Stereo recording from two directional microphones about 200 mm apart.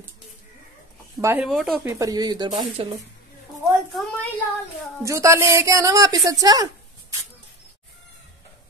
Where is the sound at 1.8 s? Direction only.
15° right (ahead or behind).